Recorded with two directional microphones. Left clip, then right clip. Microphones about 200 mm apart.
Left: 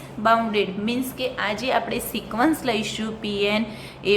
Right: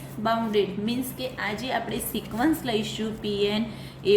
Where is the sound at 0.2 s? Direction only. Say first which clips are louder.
Left 5 dB; 15° left (ahead or behind).